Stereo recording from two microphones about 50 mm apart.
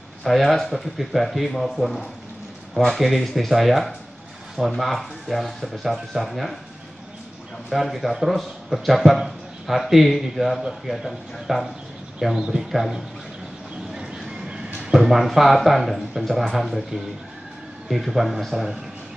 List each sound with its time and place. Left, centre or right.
0.2 s a man's voice: centre
7.7 s a man's voice: centre
12.2 s speech: centre
13.9 s train: centre
14.8 s a man's voice: centre